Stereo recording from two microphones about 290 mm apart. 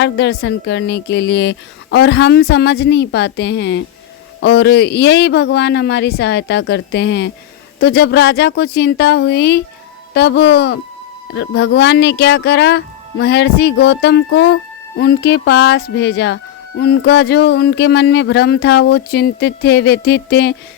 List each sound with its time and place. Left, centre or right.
0.0 s speech: left